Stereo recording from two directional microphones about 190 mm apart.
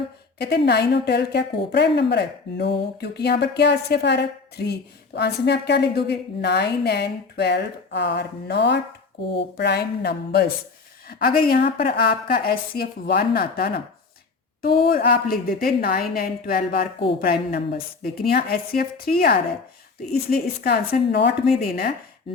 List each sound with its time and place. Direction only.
0.3 s a woman's voice: 60° left (ahead or behind)